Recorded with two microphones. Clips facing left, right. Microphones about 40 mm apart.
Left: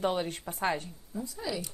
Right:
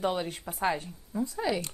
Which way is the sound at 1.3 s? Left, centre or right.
Right.